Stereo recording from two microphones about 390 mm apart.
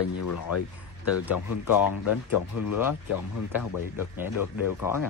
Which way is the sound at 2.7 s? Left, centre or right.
Centre.